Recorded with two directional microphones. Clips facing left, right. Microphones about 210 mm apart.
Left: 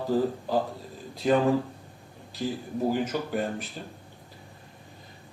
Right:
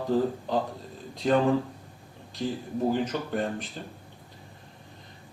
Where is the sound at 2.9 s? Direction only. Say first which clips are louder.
Even; 5° left (ahead or behind).